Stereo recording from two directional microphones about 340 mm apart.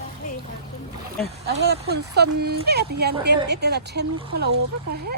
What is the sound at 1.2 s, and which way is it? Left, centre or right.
Speech, centre.